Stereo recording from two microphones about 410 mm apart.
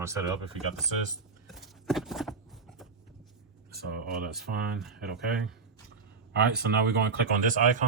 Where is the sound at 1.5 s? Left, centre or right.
Centre.